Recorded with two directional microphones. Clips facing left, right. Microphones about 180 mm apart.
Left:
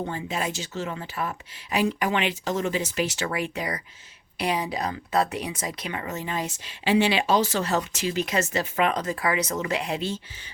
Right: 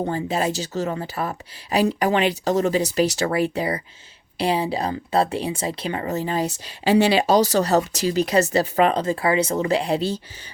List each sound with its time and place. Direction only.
0.0 s speech: 35° right (ahead or behind)